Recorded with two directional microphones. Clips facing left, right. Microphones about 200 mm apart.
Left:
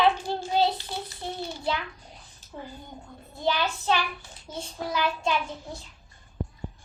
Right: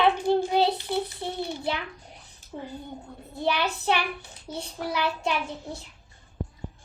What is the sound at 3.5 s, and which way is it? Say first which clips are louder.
A child's voice: even; 65° right (ahead or behind).